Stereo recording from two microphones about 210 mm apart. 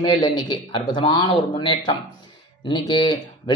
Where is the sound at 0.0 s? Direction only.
20° left (ahead or behind).